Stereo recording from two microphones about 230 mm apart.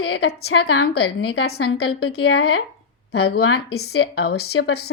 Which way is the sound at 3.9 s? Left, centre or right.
Left.